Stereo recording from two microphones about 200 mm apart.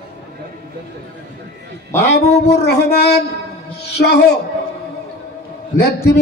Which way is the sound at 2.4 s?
55° left (ahead or behind).